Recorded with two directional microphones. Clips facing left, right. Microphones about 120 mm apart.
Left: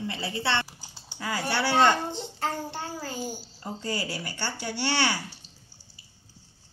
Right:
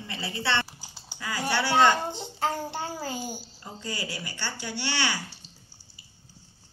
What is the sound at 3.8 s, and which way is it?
Speech, 40° left (ahead or behind).